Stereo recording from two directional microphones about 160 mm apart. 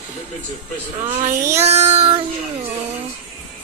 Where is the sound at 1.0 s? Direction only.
35° right (ahead or behind).